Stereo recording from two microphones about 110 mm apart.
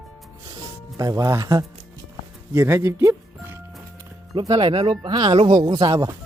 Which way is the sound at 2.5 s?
20° right (ahead or behind).